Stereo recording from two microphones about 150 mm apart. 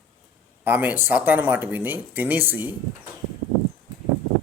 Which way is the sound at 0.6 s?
10° right (ahead or behind).